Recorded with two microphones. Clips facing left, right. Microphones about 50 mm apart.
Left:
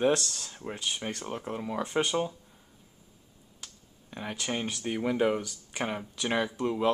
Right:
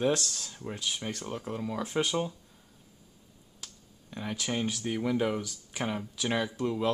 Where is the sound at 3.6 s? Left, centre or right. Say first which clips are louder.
Even; centre.